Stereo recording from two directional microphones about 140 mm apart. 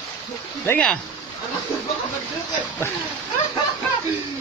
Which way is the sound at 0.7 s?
10° left (ahead or behind).